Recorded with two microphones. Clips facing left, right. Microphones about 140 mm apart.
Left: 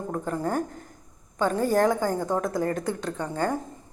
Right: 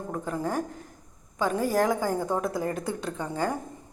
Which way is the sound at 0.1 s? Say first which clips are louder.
Left 2 dB; 5° right (ahead or behind).